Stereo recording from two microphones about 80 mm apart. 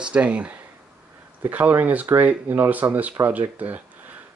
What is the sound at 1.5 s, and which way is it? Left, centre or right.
Speech, right.